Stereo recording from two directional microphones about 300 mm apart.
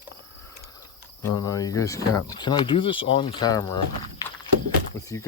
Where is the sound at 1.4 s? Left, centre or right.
Centre.